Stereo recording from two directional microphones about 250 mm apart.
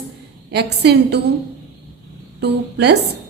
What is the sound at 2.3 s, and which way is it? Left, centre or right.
Speech, right.